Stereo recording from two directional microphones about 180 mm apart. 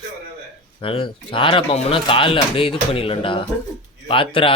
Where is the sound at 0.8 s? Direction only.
30° left (ahead or behind).